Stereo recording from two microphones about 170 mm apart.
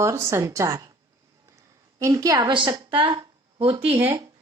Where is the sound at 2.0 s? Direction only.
20° right (ahead or behind).